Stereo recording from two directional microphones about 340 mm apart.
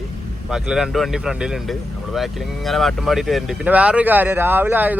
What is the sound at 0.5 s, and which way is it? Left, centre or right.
Speech, centre.